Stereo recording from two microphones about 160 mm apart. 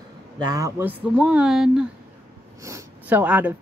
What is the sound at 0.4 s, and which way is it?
Speech, 20° right (ahead or behind).